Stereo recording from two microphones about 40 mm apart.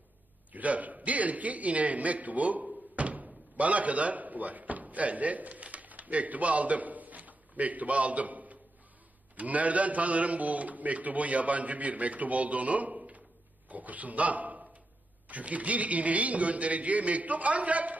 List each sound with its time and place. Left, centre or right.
0.5 s a man's voice: right